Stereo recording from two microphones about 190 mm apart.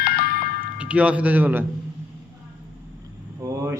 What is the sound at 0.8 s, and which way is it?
Speech, 5° right (ahead or behind).